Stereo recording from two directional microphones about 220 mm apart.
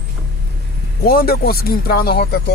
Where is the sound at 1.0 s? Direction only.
40° left (ahead or behind).